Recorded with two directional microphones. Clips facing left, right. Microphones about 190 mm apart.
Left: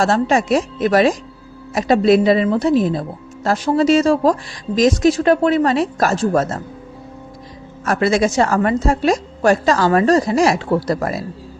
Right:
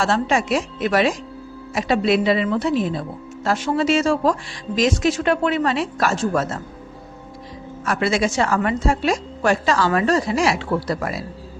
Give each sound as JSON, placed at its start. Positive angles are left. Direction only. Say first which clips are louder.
{"t": 0.0, "sound": "a woman's voice", "louder": "left 4 dB", "side_deg": 40}
{"t": 7.9, "sound": "a woman's voice", "louder": "left 4 dB", "side_deg": 45}